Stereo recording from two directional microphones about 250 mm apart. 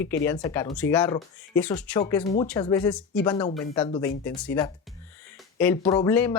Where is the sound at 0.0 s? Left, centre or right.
Centre.